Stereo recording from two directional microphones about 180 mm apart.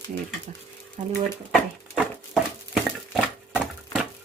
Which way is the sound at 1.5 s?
Centre (ahead or behind).